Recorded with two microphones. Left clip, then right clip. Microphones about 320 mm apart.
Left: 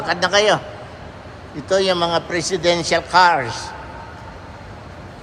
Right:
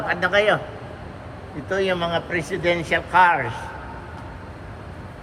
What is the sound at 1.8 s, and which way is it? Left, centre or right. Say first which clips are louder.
A man's voice: left 1 dB; centre.